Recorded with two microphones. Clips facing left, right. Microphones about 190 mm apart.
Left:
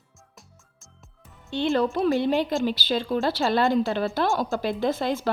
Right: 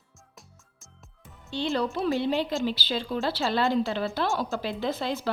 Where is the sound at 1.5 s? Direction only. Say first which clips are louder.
Left 5 dB; 55° left (ahead or behind).